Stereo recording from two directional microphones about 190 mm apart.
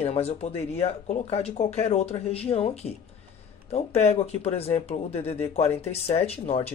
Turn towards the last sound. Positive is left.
turn(degrees=30)  # may be behind; listen again after turning